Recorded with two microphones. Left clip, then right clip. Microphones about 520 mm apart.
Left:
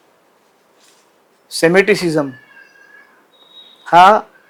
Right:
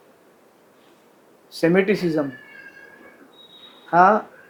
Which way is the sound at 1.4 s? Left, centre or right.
Left.